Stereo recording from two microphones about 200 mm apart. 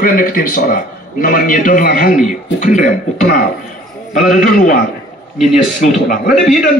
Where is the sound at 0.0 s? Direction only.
45° left (ahead or behind).